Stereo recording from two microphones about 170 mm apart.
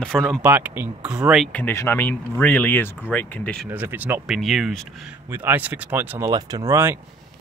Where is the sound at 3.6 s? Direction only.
10° right (ahead or behind).